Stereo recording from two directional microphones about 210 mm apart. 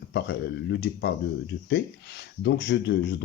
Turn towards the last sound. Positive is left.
turn(degrees=55)  # may be behind; listen again after turning